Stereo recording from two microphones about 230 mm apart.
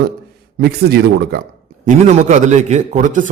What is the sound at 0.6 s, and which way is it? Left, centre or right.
Speech, right.